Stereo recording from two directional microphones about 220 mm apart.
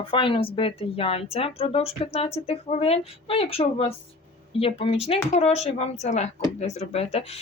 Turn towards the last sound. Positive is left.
turn(degrees=30)  # may be behind; listen again after turning